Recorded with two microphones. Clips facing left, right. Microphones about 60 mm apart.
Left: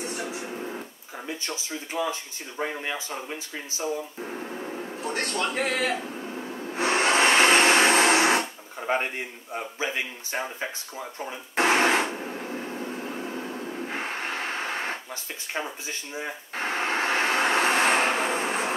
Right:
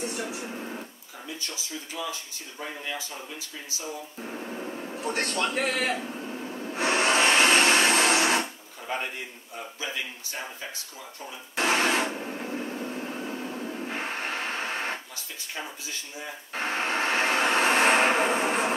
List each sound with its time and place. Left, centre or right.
0.0 s television: left
1.2 s speech: left
4.2 s a sound: centre
5.2 s speech: left
5.9 s vehicle: left
12.1 s a sound: centre
12.4 s vehicle: left
13.3 s music: left
14.4 s radio: left
15.5 s speech: left
16.8 s vehicle: left
17.4 s a sound: left
17.6 s a sound: right